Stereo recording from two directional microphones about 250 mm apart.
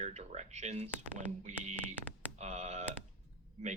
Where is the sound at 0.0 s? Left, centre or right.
Right.